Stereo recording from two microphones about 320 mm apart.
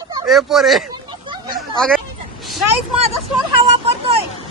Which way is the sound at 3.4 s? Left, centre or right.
Centre.